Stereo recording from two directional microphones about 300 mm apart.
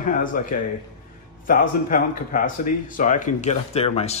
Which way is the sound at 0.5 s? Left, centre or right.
Left.